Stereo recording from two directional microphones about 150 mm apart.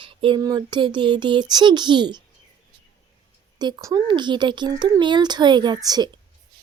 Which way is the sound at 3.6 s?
25° right (ahead or behind).